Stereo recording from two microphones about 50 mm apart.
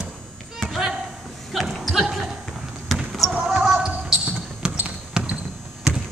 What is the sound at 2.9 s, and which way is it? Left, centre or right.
Basketball bounce, centre.